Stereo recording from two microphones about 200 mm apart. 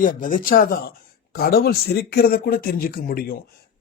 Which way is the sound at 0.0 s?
45° left (ahead or behind).